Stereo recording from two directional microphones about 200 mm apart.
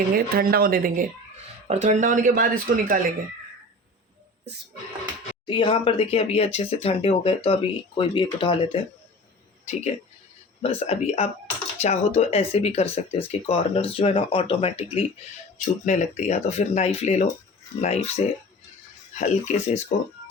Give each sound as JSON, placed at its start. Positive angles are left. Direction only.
{"t": 0.1, "sound": "speech", "side_deg": -50}
{"t": 1.6, "sound": "speech", "side_deg": -35}
{"t": 5.5, "sound": "speech", "side_deg": 25}
{"t": 10.6, "sound": "speech", "side_deg": 30}